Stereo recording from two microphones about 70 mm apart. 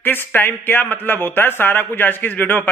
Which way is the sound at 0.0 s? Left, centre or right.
Left.